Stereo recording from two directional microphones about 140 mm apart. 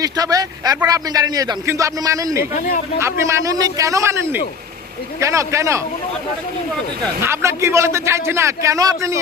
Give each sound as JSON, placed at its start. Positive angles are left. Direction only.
{"t": 0.0, "sound": "a man's voice", "side_deg": -25}
{"t": 7.2, "sound": "a man's voice", "side_deg": -20}